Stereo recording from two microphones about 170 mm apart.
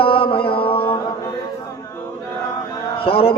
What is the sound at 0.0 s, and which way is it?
Mantra, 30° left (ahead or behind).